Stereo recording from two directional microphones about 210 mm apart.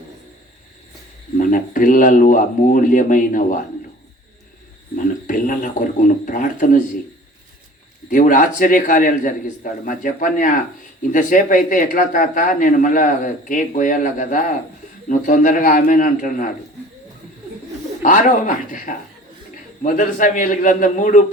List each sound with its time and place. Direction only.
1.4 s speech: 40° left (ahead or behind)
4.9 s speech: 40° left (ahead or behind)
8.1 s speech: 40° left (ahead or behind)
18.0 s speech: 40° left (ahead or behind)